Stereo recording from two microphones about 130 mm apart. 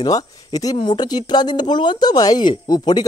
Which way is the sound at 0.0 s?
30° left (ahead or behind).